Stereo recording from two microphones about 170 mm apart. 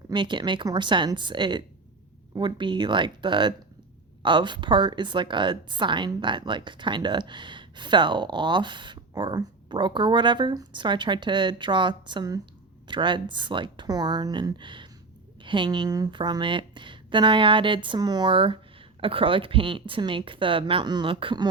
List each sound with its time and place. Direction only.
0.1 s a woman's voice: 25° right (ahead or behind)